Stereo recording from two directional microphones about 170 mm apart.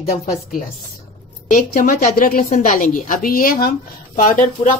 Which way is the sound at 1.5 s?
50° left (ahead or behind).